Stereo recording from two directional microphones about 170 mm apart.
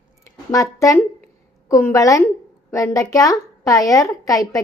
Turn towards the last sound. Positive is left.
turn(degrees=20)  # may be behind; listen again after turning